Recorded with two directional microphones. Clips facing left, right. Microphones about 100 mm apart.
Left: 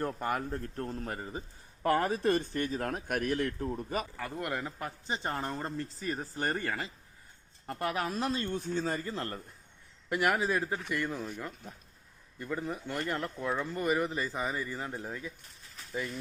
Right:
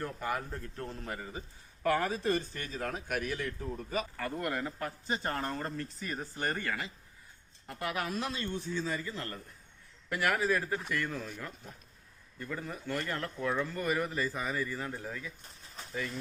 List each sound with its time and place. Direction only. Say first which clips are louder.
0.0 s a man's voice: left 3 dB; 45° left (ahead or behind)
4.2 s a man's voice: right 1 dB; 10° left (ahead or behind); by 9.4 s 35° left (ahead or behind)
10.1 s speech: left 1 dB; 20° left (ahead or behind)
15.6 s a sound: right 3 dB; 25° right (ahead or behind)